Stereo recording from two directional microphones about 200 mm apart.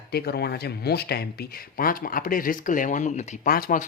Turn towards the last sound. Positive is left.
turn(degrees=45)  # may be behind; listen again after turning